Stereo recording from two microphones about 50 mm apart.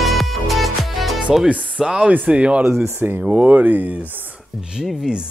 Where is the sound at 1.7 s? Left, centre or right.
Centre.